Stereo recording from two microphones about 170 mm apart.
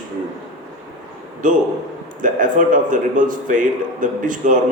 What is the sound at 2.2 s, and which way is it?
A man's voice, 50° right (ahead or behind).